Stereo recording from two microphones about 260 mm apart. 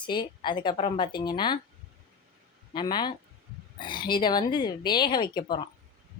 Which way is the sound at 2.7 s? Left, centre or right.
Centre.